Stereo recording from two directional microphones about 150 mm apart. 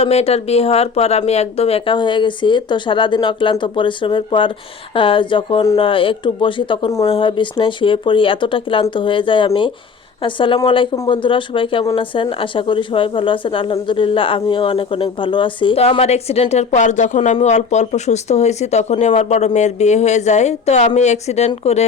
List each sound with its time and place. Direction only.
0.0 s speech: 45° left (ahead or behind)